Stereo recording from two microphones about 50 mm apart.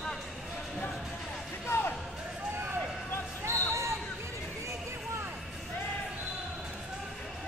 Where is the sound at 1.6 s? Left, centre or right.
Left.